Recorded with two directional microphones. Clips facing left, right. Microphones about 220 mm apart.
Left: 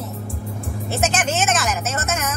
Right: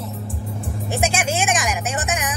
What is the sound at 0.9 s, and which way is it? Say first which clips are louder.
Vehicle: even; 10° right (ahead or behind).